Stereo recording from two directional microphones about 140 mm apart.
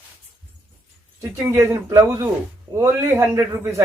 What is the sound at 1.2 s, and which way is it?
A man's voice, 20° right (ahead or behind).